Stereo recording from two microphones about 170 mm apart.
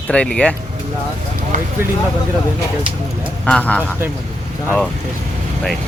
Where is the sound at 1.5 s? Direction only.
50° right (ahead or behind).